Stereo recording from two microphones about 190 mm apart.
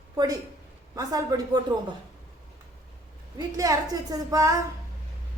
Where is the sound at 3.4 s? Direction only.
20° right (ahead or behind).